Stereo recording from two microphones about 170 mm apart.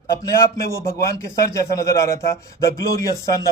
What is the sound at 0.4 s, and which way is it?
A man's voice, 15° left (ahead or behind).